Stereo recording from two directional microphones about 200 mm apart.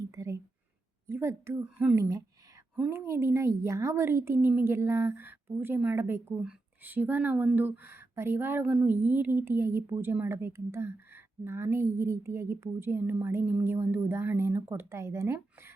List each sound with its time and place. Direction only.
0.1 s whispering: 15° right (ahead or behind)
1.0 s a woman's voice: 15° right (ahead or behind)